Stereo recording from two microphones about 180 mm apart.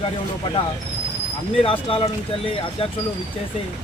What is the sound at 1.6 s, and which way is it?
Speech, 30° left (ahead or behind).